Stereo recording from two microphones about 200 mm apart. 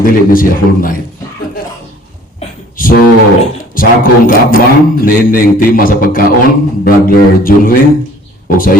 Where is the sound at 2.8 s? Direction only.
45° left (ahead or behind).